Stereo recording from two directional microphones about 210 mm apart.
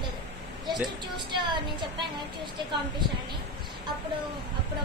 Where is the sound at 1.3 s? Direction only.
20° right (ahead or behind).